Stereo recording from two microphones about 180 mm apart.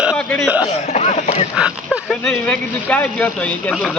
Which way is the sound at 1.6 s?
5° right (ahead or behind).